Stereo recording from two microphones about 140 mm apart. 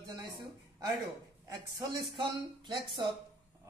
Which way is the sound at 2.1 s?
35° right (ahead or behind).